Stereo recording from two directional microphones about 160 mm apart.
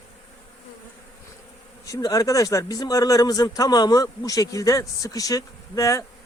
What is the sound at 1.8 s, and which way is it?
Speech, 20° left (ahead or behind).